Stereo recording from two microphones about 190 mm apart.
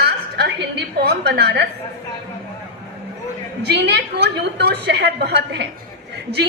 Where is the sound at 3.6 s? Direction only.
65° right (ahead or behind).